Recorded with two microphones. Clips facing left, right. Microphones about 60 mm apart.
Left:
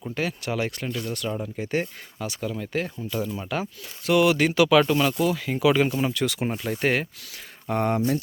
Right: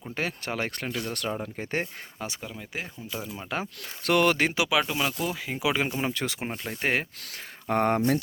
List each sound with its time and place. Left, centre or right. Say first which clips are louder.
0.1 s speech: left 3 dB; right
1.0 s speech: left 2 dB; right
1.8 s speech: left 3 dB; right
2.4 s speech: left 8 dB; centre
4.0 s speech: left 3 dB; right
4.4 s speech: left 4 dB; right
4.6 s speech: left 7 dB; centre
5.3 s speech: left 7 dB; centre
6.1 s speech: left 5 dB; right
6.5 s speech: left 6 dB; centre
6.8 s speech: left 3 dB; right
7.7 s speech: even; right